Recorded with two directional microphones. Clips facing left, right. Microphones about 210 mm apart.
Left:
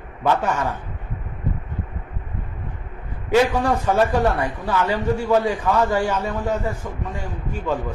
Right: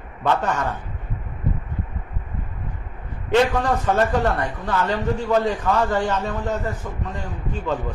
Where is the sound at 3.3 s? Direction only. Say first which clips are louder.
Left 1 dB; 10° left (ahead or behind).